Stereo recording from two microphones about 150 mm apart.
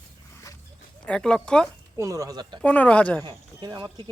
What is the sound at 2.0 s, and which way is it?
Speech, 20° right (ahead or behind).